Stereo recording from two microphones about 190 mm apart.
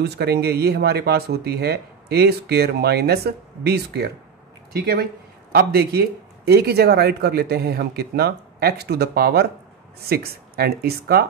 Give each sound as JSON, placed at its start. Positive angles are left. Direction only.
{"t": 0.0, "sound": "speech", "side_deg": -60}